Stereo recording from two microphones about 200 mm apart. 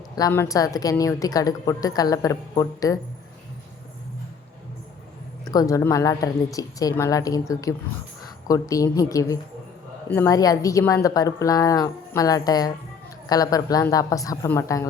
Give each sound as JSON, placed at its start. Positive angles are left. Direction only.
{"t": 0.2, "sound": "a woman's voice", "side_deg": 15}
{"t": 5.5, "sound": "a woman's voice", "side_deg": 15}